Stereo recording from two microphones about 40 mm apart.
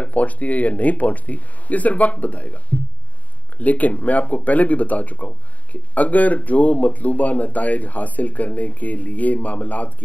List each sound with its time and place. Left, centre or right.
0.0 s speech: left